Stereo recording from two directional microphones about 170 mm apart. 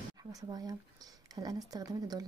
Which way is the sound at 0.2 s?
20° right (ahead or behind).